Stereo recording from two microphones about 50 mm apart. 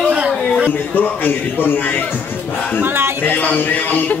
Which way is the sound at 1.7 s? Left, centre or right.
Left.